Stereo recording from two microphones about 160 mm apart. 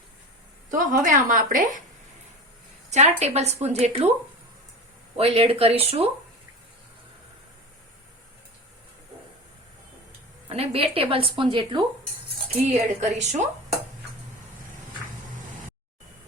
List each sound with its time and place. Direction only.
0.7 s a woman's voice: 55° right (ahead or behind)
2.9 s speech: 45° right (ahead or behind)
5.1 s a woman's voice: 35° right (ahead or behind)
10.5 s a woman's voice: 40° right (ahead or behind)
12.5 s speech: 45° right (ahead or behind)